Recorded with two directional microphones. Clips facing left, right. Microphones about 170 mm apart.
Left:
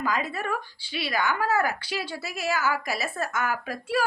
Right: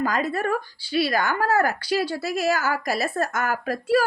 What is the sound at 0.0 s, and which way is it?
Speech, 40° right (ahead or behind).